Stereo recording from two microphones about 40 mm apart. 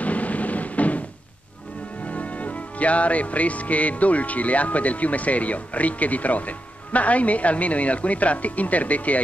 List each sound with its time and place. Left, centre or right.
0.0 s music: left
2.0 s speech: left